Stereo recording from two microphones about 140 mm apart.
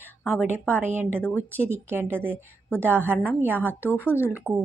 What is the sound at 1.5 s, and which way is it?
Speech, 15° right (ahead or behind).